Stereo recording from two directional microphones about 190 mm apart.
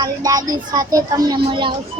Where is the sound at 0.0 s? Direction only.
20° right (ahead or behind).